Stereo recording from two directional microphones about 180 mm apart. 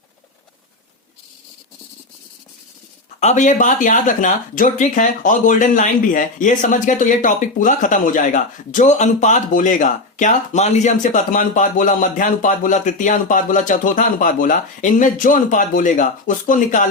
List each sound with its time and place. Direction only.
3.2 s speech: 40° left (ahead or behind)